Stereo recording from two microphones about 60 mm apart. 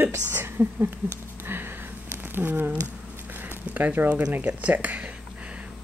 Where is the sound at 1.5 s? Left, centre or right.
Right.